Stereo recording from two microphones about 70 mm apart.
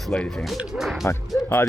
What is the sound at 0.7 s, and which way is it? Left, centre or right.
Speech, centre.